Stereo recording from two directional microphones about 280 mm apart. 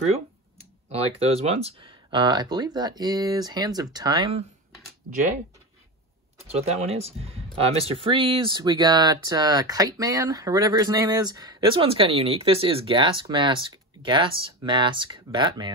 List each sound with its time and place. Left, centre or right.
0.6 s speech: right
6.4 s speech: right